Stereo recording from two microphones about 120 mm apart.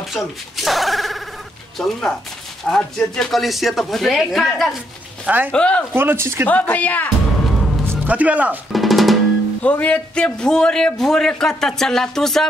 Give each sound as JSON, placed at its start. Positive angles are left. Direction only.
{"t": 0.1, "sound": "a man's voice", "side_deg": 0}
{"t": 5.2, "sound": "speech", "side_deg": -15}
{"t": 5.5, "sound": "speech", "side_deg": 10}
{"t": 5.9, "sound": "speech", "side_deg": -20}
{"t": 6.5, "sound": "speech", "side_deg": 15}
{"t": 7.5, "sound": "music", "side_deg": 0}
{"t": 7.8, "sound": "a man's voice", "side_deg": -20}
{"t": 8.7, "sound": "drum", "side_deg": 0}
{"t": 9.6, "sound": "a man's voice", "side_deg": 10}